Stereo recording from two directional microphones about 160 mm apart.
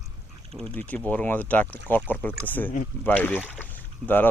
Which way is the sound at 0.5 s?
5° left (ahead or behind).